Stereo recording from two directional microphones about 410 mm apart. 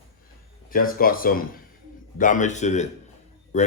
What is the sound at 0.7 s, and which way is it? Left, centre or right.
Speech, left.